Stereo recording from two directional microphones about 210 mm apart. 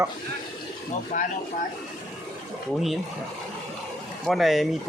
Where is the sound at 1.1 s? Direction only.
35° left (ahead or behind).